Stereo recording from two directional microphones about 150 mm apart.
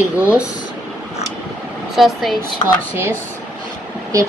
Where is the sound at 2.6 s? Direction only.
50° left (ahead or behind).